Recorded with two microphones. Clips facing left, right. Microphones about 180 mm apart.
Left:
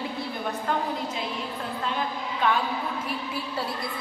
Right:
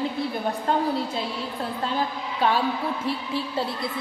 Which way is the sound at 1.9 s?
35° right (ahead or behind).